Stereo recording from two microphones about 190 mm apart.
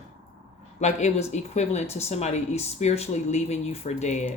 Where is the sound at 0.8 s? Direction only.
35° left (ahead or behind).